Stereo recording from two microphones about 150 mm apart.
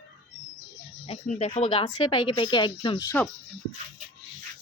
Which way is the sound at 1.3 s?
45° left (ahead or behind).